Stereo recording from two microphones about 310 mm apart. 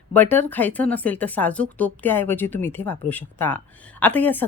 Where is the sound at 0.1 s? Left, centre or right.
Centre.